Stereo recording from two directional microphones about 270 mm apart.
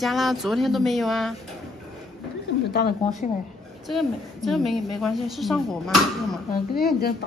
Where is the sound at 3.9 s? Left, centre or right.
Centre.